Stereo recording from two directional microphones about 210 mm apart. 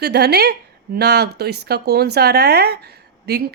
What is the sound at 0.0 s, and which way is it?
A woman's voice, 50° right (ahead or behind).